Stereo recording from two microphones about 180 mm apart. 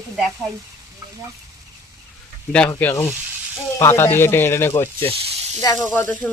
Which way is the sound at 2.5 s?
10° left (ahead or behind).